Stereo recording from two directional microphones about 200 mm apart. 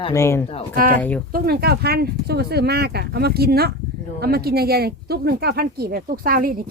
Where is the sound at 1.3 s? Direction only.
50° right (ahead or behind).